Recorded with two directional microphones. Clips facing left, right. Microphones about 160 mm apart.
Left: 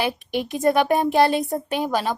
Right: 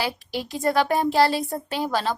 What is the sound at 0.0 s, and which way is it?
Speech, 20° left (ahead or behind).